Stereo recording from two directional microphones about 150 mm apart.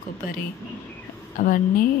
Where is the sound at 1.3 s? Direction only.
65° left (ahead or behind).